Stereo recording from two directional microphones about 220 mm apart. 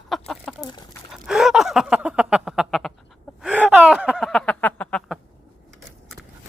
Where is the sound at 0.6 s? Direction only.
20° left (ahead or behind).